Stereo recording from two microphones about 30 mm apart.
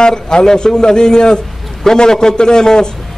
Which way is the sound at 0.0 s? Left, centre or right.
Left.